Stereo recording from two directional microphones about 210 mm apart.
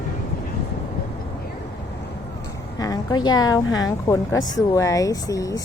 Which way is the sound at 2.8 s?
20° left (ahead or behind).